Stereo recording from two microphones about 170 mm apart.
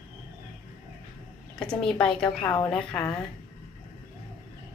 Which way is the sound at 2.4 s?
25° left (ahead or behind).